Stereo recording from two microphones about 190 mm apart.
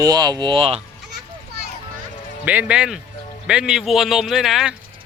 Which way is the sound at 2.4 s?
10° right (ahead or behind).